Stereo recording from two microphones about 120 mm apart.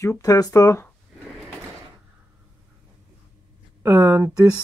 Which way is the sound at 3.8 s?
20° right (ahead or behind).